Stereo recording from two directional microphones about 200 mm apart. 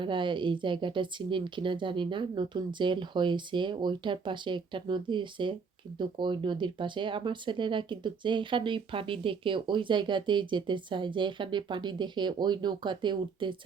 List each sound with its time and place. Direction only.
0.0 s speech: 25° right (ahead or behind)